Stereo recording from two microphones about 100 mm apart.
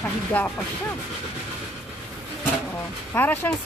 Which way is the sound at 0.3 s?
15° left (ahead or behind).